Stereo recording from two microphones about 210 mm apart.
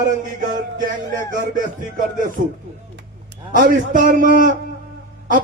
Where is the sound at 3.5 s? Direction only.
40° right (ahead or behind).